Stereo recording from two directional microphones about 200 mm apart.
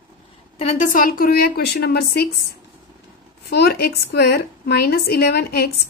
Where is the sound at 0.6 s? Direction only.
40° left (ahead or behind).